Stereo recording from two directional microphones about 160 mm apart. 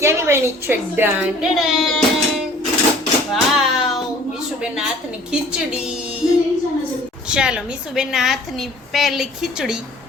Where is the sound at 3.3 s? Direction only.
Centre (ahead or behind).